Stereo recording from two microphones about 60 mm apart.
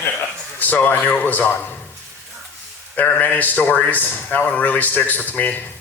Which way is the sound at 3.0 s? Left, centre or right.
Left.